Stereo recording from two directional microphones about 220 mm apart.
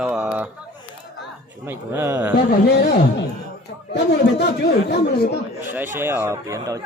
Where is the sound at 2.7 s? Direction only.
45° left (ahead or behind).